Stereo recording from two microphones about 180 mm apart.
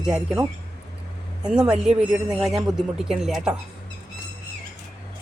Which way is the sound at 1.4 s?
5° right (ahead or behind).